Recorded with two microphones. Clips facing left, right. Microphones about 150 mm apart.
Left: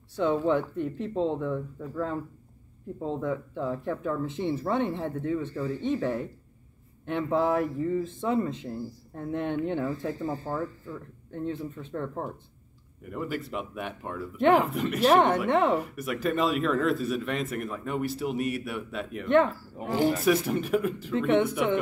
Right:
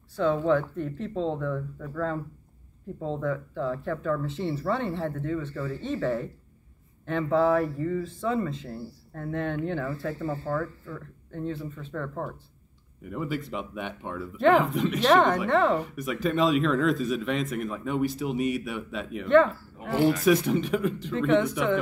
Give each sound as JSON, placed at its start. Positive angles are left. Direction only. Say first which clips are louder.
{"t": 0.2, "sound": "speech", "louder": "right 1 dB", "side_deg": 20}
{"t": 13.1, "sound": "speech", "louder": "right 1 dB", "side_deg": 0}
{"t": 19.2, "sound": "speech", "louder": "right 3 dB", "side_deg": 20}
{"t": 20.2, "sound": "speech", "louder": "right 2 dB", "side_deg": 0}